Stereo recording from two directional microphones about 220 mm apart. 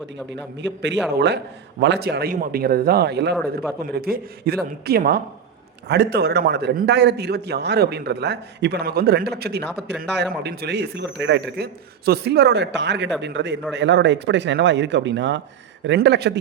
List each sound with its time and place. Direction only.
0.6 s a man's voice: 50° right (ahead or behind)